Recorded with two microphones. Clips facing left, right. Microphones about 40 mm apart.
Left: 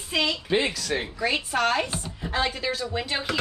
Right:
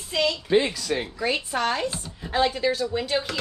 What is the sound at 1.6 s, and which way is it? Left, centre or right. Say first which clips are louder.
Speech: left 1 dB; left.